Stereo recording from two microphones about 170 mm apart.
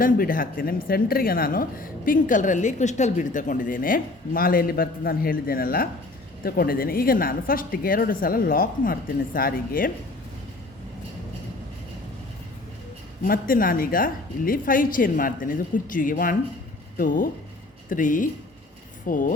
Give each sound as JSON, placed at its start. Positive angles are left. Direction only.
{"t": 0.0, "sound": "a woman's voice", "side_deg": 55}
{"t": 13.2, "sound": "a woman's voice", "side_deg": 55}